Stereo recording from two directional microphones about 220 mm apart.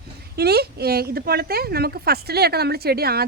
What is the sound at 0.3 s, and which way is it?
Speech, 45° right (ahead or behind).